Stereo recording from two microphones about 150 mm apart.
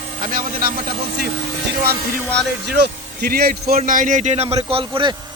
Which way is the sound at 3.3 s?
90° right.